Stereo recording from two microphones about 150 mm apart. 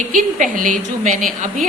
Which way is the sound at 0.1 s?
60° right (ahead or behind).